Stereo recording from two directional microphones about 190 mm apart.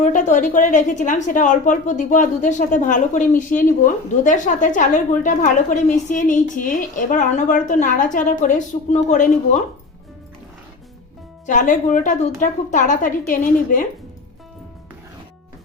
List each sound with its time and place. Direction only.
0.0 s a woman's voice: 40° left (ahead or behind)
11.4 s a woman's voice: 40° left (ahead or behind)